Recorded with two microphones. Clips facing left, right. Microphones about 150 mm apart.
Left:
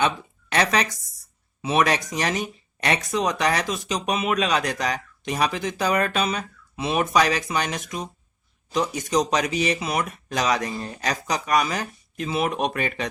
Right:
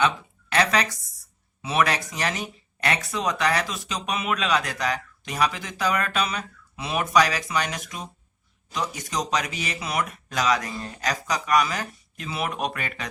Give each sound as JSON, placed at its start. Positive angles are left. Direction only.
{"t": 0.5, "sound": "speech", "side_deg": 20}